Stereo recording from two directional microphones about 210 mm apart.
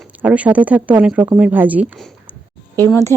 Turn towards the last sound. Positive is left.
turn(degrees=-15)  # may be behind; listen again after turning